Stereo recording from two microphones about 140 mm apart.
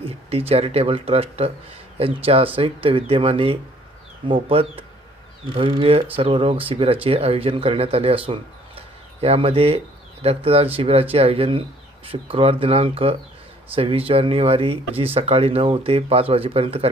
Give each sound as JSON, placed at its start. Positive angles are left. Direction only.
{"t": 0.0, "sound": "speech", "side_deg": -45}